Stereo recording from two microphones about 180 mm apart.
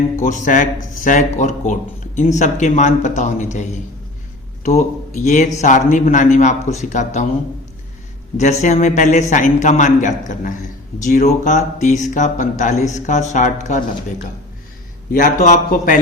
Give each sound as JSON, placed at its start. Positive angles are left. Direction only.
{"t": 0.2, "sound": "speech", "side_deg": 45}
{"t": 8.4, "sound": "speech", "side_deg": 40}
{"t": 15.1, "sound": "speech", "side_deg": 45}